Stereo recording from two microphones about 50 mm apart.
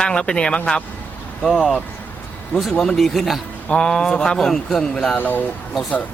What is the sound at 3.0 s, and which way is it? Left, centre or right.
Speech, centre.